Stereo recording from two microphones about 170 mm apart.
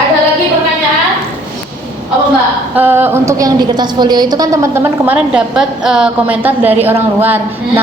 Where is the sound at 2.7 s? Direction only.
10° right (ahead or behind).